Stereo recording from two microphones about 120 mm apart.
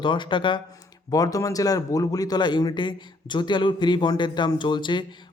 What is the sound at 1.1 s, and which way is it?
A man's voice, 30° left (ahead or behind).